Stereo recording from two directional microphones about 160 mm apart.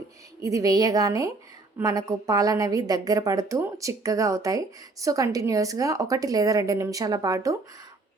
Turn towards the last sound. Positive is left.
turn(degrees=-20)  # may be behind; listen again after turning